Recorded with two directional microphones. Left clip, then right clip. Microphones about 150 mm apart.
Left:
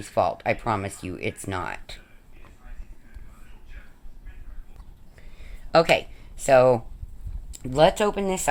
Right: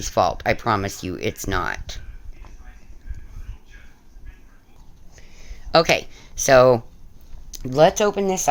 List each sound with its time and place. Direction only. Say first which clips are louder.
0.0 s speech: right 4 dB; 35° right (ahead or behind)
5.1 s a sound: right 4 dB; 10° right (ahead or behind)
5.7 s speech: right 2 dB; 30° right (ahead or behind)